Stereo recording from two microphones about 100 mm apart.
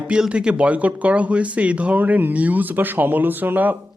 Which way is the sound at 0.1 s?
10° right (ahead or behind).